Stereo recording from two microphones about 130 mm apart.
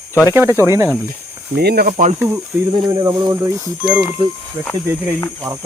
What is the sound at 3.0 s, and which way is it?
Speech, 30° right (ahead or behind).